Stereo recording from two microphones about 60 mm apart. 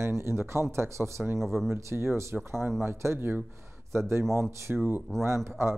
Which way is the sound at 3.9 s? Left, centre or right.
Right.